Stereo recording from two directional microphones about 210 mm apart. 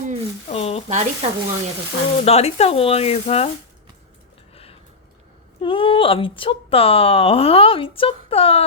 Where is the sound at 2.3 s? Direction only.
30° left (ahead or behind).